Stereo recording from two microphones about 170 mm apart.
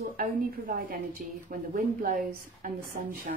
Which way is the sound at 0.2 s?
55° right (ahead or behind).